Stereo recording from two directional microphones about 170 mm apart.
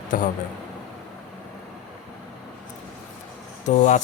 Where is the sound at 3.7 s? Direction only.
45° left (ahead or behind).